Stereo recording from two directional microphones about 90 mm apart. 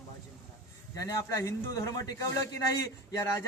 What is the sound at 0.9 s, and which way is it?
Speech, 40° left (ahead or behind).